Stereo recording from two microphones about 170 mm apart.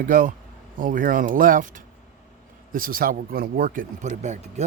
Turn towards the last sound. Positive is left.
turn(degrees=-45)  # may be behind; listen again after turning